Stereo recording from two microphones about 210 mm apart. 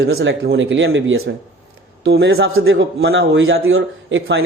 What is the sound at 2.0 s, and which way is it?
A man's voice, 55° right (ahead or behind).